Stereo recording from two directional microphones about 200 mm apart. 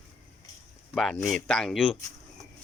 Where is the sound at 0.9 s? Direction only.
5° left (ahead or behind).